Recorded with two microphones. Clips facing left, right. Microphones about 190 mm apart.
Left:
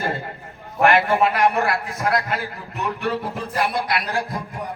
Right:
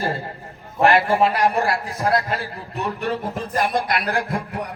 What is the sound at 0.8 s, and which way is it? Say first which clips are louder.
A man's voice: right 1 dB; 30° right (ahead or behind).